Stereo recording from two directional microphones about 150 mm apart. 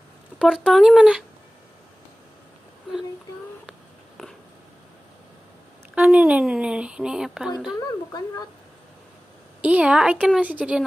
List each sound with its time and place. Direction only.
0.4 s speech: 5° right (ahead or behind)
5.9 s speech: 10° right (ahead or behind)
7.7 s a woman's voice: 25° left (ahead or behind)
9.6 s a woman's voice: 10° right (ahead or behind)